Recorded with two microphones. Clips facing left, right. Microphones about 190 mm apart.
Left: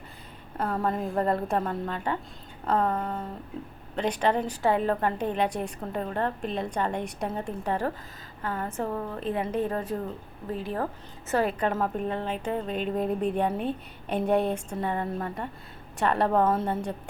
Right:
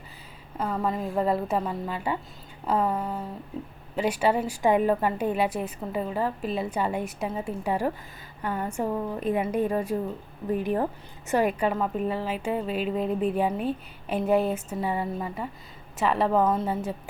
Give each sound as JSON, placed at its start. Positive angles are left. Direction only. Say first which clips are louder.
{"t": 0.5, "sound": "a woman's voice", "louder": "even", "side_deg": 0}
{"t": 11.7, "sound": "a woman's voice", "louder": "right 1 dB", "side_deg": 0}